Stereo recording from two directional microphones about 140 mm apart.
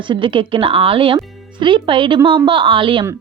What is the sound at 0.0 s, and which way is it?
A woman's voice, 35° right (ahead or behind).